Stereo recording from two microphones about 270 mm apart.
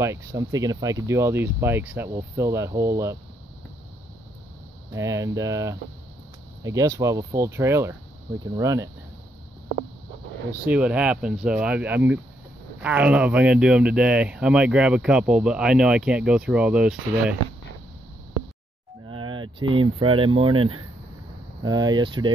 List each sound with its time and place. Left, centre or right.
0.0 s speech: centre
4.9 s speech: centre
10.6 s speech: centre
19.0 s a sound: centre
19.8 s speech: centre